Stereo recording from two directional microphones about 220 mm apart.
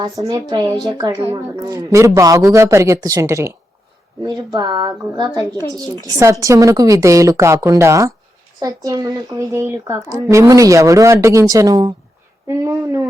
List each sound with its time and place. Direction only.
0.0 s a woman's voice: 15° right (ahead or behind)